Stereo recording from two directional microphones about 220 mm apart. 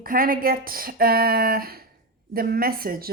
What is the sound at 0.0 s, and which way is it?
A woman's voice, 40° right (ahead or behind).